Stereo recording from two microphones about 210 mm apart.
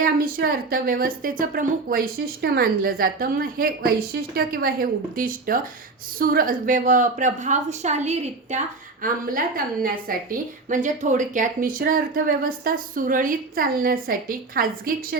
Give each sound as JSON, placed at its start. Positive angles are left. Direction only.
{"t": 0.0, "sound": "a woman's voice", "side_deg": -45}